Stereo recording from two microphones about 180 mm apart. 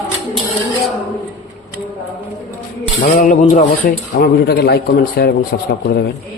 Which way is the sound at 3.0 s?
45° left (ahead or behind).